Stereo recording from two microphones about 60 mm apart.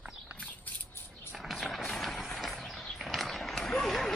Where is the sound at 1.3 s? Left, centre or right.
Centre.